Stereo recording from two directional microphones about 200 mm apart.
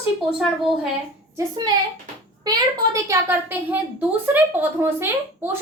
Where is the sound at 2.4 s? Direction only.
20° right (ahead or behind).